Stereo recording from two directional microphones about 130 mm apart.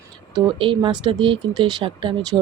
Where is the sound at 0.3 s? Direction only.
35° right (ahead or behind).